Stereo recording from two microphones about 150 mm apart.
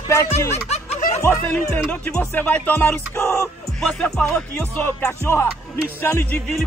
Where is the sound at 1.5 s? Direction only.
5° left (ahead or behind).